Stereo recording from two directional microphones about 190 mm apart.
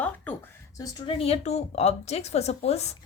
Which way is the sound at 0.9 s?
30° left (ahead or behind).